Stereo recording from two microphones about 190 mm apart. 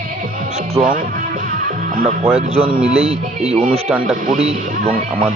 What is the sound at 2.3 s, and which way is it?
Speech, 30° right (ahead or behind).